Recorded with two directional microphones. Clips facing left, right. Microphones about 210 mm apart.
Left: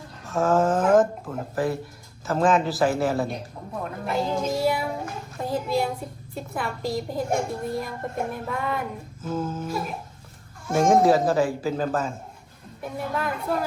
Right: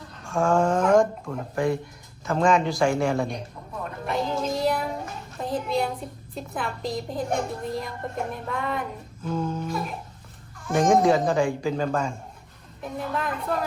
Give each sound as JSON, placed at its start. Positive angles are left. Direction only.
{"t": 0.3, "sound": "a child's voice", "side_deg": 5}